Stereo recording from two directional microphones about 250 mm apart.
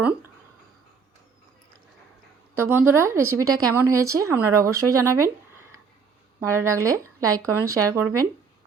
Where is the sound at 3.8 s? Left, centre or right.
Right.